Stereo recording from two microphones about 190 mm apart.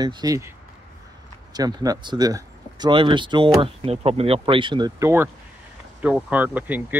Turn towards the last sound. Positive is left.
turn(degrees=-10)  # may be behind; listen again after turning